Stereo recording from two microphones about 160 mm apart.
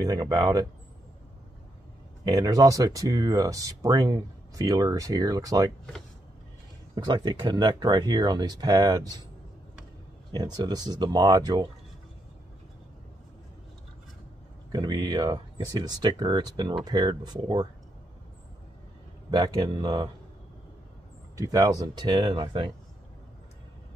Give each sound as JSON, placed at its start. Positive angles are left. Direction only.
{"t": 0.0, "sound": "speech", "side_deg": -25}
{"t": 2.2, "sound": "speech", "side_deg": -25}
{"t": 7.0, "sound": "speech", "side_deg": -25}
{"t": 10.3, "sound": "speech", "side_deg": -25}
{"t": 14.7, "sound": "speech", "side_deg": -25}
{"t": 19.3, "sound": "speech", "side_deg": -25}
{"t": 21.4, "sound": "speech", "side_deg": -20}